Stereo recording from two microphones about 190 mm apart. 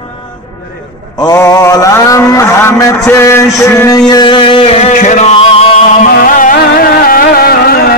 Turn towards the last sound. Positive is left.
turn(degrees=55)  # may be behind; listen again after turning